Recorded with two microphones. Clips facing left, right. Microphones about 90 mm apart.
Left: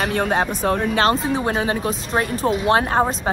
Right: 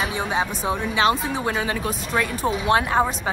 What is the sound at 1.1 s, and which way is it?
Speech, 35° left (ahead or behind).